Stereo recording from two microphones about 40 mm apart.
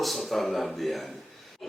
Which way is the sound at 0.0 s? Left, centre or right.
Centre.